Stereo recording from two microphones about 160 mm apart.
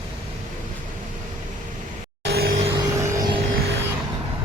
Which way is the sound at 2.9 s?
20° right (ahead or behind).